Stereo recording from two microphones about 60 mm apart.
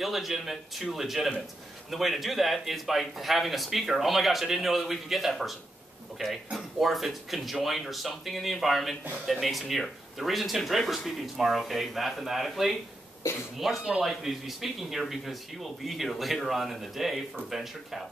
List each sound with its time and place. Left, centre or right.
0.0 s speech: centre
13.2 s speech: left
13.6 s speech: centre